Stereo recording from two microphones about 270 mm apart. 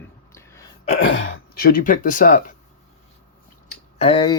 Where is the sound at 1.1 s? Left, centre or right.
Left.